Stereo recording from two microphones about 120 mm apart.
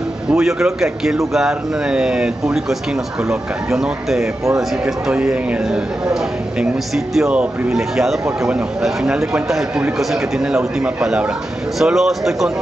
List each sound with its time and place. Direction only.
0.3 s a man's voice: 5° right (ahead or behind)
7.2 s a man's voice: 5° right (ahead or behind)